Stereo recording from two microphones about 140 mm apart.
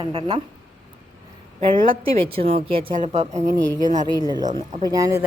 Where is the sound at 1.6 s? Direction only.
40° right (ahead or behind).